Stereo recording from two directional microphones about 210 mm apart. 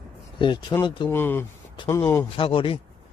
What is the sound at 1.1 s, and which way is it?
Speech, 10° left (ahead or behind).